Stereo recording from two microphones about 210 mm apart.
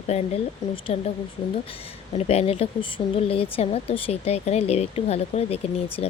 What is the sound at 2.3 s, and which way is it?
Speech, 30° left (ahead or behind).